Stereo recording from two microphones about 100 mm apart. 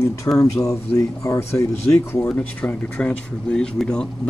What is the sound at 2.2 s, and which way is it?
Speech, 10° left (ahead or behind).